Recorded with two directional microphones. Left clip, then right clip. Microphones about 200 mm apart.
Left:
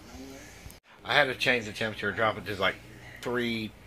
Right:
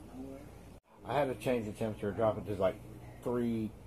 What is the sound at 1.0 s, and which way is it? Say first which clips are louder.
Speech: left 8 dB; 35° left (ahead or behind).